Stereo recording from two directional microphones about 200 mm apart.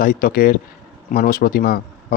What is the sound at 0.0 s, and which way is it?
Speech, 45° left (ahead or behind).